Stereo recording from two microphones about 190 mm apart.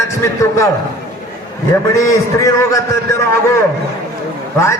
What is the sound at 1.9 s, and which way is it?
A man's voice, 15° left (ahead or behind).